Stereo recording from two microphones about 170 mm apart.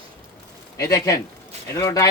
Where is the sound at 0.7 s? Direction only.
20° left (ahead or behind).